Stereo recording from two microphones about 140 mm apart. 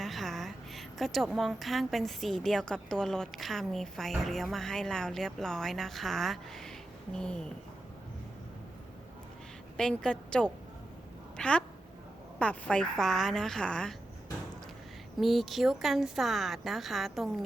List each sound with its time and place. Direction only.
0.0 s a sound: centre (ahead or behind)
1.4 s a woman's voice: centre (ahead or behind)
9.7 s a woman's voice: 5° left (ahead or behind)
15.2 s a woman's voice: centre (ahead or behind)